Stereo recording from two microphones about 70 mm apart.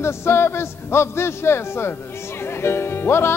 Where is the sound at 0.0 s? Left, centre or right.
Left.